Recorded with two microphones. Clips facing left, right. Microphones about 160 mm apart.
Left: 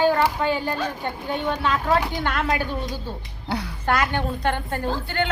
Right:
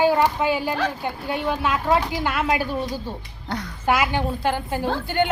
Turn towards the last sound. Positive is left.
turn(degrees=-10)  # may be behind; listen again after turning